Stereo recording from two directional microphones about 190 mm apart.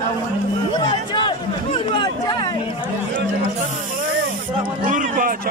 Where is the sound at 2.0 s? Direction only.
25° left (ahead or behind).